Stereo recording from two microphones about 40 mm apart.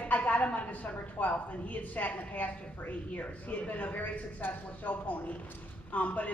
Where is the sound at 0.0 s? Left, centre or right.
Left.